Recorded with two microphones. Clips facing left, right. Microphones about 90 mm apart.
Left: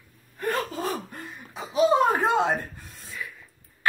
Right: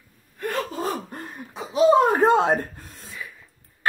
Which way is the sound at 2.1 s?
45° right (ahead or behind).